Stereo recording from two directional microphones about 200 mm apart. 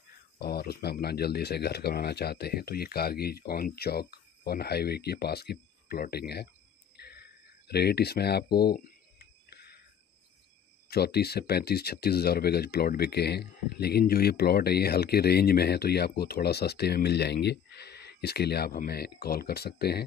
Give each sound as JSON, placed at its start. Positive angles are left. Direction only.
{"t": 0.4, "sound": "speech", "side_deg": 50}
{"t": 7.0, "sound": "a sound", "side_deg": 55}
{"t": 10.9, "sound": "speech", "side_deg": 55}